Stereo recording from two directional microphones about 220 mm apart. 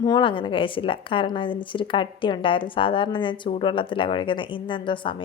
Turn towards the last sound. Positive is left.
turn(degrees=20)  # may be behind; listen again after turning